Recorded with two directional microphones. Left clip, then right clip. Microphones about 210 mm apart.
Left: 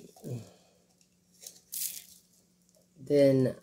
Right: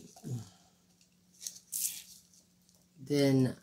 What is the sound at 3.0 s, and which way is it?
Speech, 20° right (ahead or behind).